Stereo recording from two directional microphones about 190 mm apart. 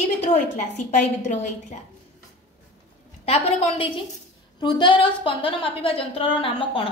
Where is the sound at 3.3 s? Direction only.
30° left (ahead or behind).